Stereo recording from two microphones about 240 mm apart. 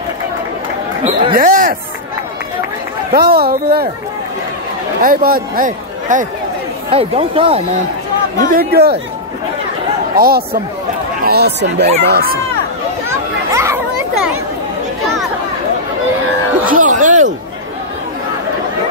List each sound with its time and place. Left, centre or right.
1.3 s speech: right
3.1 s a man's voice: right
5.0 s a man's voice: right
8.4 s a man's voice: right
10.1 s a man's voice: right
13.1 s children playing: centre
16.6 s a sound: right